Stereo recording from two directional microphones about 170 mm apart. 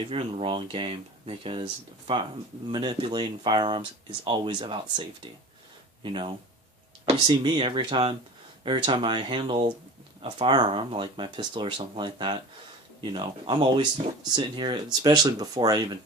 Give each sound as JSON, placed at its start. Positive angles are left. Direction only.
{"t": 0.1, "sound": "speech", "side_deg": -35}